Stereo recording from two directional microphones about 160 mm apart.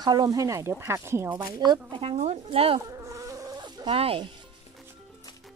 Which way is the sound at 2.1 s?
45° right (ahead or behind).